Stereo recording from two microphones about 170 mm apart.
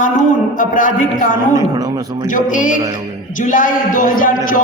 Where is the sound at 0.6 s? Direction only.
50° left (ahead or behind).